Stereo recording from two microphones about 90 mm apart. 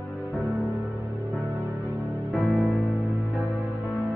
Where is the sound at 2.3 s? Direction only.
Centre (ahead or behind).